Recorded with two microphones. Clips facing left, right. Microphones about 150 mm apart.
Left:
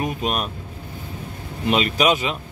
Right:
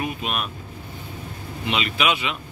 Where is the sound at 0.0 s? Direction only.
40° left (ahead or behind).